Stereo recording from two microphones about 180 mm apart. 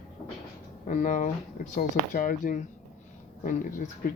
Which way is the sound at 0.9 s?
45° left (ahead or behind).